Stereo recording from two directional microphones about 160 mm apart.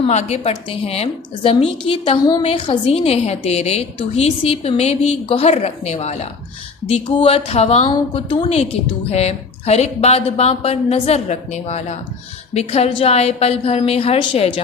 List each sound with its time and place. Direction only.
0.1 s a woman's voice: 45° left (ahead or behind)